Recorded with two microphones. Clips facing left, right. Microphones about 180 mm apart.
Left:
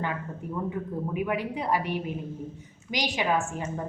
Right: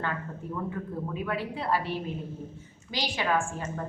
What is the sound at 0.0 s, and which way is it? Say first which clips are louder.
A woman's voice: left 2 dB; 15° left (ahead or behind).